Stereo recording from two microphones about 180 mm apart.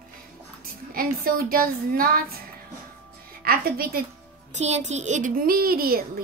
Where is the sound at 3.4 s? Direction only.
55° right (ahead or behind).